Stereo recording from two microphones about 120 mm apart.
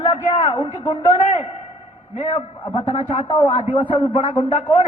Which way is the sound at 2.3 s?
45° left (ahead or behind).